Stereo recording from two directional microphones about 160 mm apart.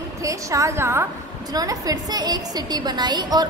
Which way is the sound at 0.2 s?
20° right (ahead or behind).